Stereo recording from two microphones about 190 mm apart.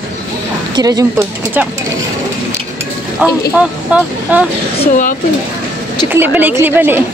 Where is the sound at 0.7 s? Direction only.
20° right (ahead or behind).